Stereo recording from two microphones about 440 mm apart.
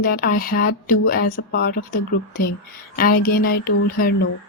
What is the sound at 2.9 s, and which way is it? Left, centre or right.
Speech, centre.